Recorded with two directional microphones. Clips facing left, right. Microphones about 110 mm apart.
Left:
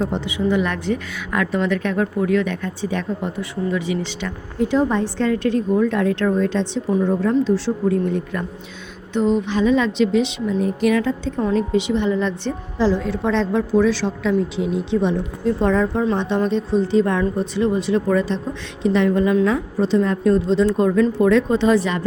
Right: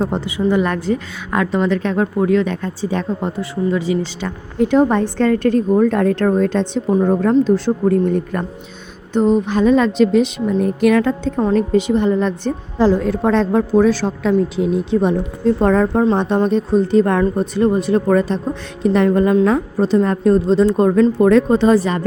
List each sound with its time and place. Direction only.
0.0 s a woman's voice: 40° right (ahead or behind)
4.6 s a woman's voice: 55° right (ahead or behind)
11.3 s a woman's voice: 45° right (ahead or behind)